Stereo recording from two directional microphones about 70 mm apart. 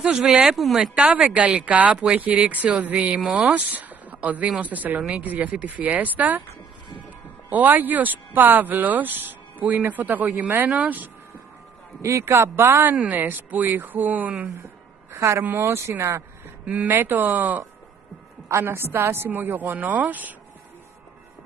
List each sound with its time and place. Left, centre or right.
0.0 s speech: centre
0.6 s speech: centre
0.9 s speech: centre
7.4 s speech: right
12.0 s speech: right
12.9 s speech: right
15.1 s speech: right
16.6 s speech: right
18.5 s speech: right